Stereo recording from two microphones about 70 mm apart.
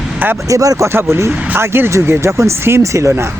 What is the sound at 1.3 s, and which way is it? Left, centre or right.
Speech, centre.